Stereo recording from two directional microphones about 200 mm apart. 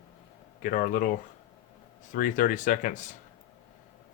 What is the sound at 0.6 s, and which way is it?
Speech, 45° left (ahead or behind).